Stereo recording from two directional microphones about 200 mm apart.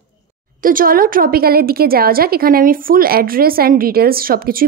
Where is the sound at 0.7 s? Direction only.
45° right (ahead or behind).